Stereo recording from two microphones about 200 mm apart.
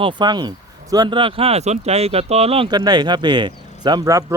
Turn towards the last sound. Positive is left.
turn(degrees=-20)  # may be behind; listen again after turning